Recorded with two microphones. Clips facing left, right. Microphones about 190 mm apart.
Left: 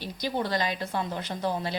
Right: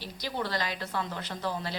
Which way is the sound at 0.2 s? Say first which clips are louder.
Left 4 dB; 15° left (ahead or behind).